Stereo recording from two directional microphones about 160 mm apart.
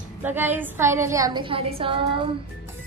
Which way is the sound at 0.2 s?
10° right (ahead or behind).